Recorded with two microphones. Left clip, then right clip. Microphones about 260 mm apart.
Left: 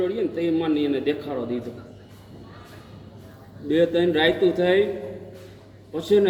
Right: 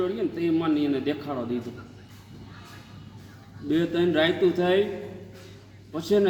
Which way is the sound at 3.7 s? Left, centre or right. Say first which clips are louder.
Left 4 dB; centre.